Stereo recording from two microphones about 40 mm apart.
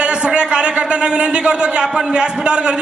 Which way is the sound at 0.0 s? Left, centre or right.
Right.